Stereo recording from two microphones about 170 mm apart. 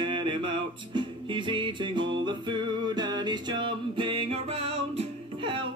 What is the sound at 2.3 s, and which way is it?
Music, 25° right (ahead or behind).